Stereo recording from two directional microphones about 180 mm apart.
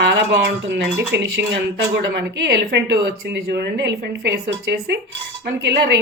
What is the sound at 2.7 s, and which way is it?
A woman's voice, 75° right (ahead or behind).